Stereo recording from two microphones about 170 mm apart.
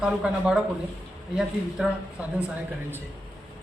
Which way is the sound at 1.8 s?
5° right (ahead or behind).